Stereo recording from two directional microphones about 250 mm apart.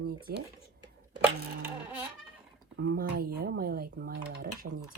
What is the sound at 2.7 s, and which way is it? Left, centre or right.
Speech, right.